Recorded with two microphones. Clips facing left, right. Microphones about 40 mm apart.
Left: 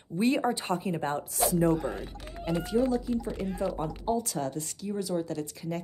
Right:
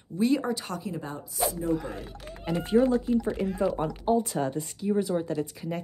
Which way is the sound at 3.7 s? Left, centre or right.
Right.